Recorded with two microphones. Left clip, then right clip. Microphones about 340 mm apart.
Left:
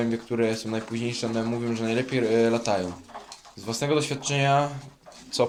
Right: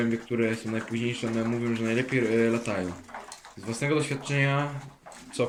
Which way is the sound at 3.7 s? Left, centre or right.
Centre.